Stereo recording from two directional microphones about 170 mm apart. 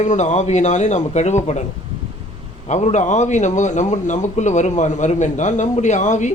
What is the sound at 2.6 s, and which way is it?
A man's voice, 45° left (ahead or behind).